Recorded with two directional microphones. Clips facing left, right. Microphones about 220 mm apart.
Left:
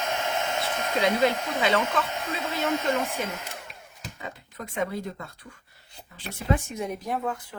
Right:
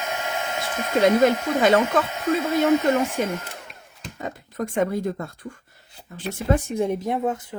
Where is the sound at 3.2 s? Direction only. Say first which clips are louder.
Right 7 dB; 45° right (ahead or behind).